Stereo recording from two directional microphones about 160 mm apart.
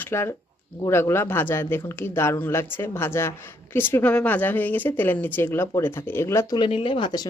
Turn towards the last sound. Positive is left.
turn(degrees=25)  # may be behind; listen again after turning